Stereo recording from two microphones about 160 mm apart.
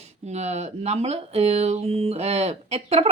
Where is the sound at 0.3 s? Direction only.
45° right (ahead or behind).